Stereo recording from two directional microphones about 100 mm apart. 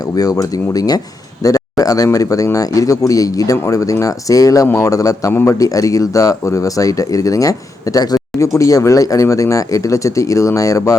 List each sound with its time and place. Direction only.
0.2 s speech: 35° left (ahead or behind)
5.3 s a man's voice: 20° left (ahead or behind)
5.5 s speech: 35° left (ahead or behind)